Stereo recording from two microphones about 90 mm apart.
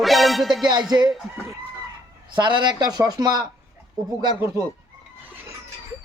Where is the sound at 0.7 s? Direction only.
50° right (ahead or behind).